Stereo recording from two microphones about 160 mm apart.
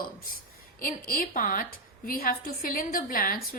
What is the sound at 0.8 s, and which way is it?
A woman's voice, 60° left (ahead or behind).